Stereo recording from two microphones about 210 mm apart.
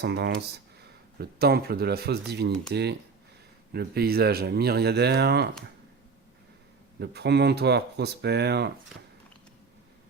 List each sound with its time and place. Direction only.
0.0 s speech: 50° right (ahead or behind)
7.0 s speech: 50° right (ahead or behind)